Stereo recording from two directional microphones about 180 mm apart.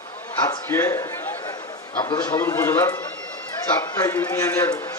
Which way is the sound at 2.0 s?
20° left (ahead or behind).